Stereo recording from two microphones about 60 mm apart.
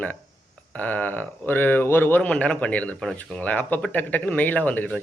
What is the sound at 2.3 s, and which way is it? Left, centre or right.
Speech, centre.